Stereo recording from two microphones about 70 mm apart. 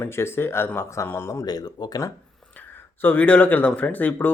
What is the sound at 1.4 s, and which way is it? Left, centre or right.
Speech, left.